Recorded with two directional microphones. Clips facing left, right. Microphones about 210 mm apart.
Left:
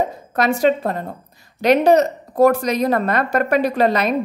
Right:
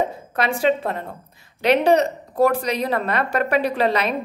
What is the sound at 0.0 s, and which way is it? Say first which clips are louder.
A woman's voice: left 3 dB; 40° left (ahead or behind).